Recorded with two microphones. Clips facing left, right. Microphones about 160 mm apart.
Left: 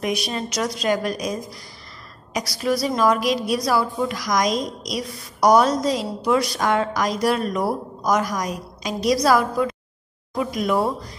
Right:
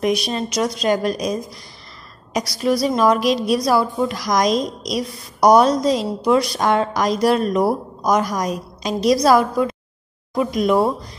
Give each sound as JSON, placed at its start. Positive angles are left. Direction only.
{"t": 0.0, "sound": "a woman's voice", "side_deg": -25}
{"t": 2.6, "sound": "a woman's voice", "side_deg": -25}